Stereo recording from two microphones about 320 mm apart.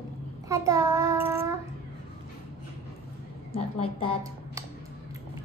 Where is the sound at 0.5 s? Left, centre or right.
Centre.